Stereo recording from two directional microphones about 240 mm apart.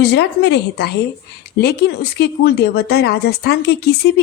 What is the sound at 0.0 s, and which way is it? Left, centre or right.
Speech, left.